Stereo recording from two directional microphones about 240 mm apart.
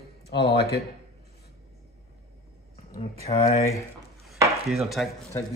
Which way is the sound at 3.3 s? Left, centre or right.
Left.